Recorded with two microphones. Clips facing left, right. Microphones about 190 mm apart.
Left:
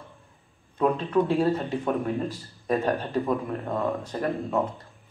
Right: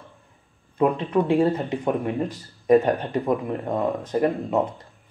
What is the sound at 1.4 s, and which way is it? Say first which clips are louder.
Speech: right 3 dB; 15° right (ahead or behind).